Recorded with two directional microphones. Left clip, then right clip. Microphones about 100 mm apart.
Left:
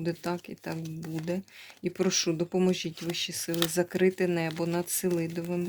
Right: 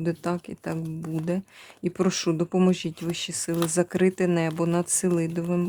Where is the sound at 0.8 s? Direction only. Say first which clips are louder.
Right 5 dB; 35° right (ahead or behind).